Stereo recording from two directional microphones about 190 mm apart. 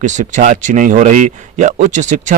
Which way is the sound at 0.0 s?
40° right (ahead or behind).